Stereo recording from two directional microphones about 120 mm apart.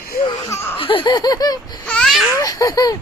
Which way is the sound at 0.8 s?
45° left (ahead or behind).